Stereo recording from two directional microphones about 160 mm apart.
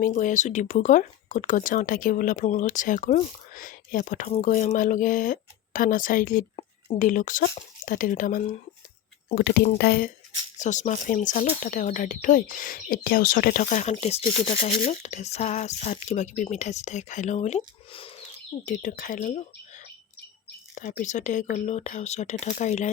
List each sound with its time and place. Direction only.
0.0 s speech: 55° left (ahead or behind)
9.3 s speech: 90° left
10.6 s speech: 50° left (ahead or behind)
18.6 s speech: 55° left (ahead or behind)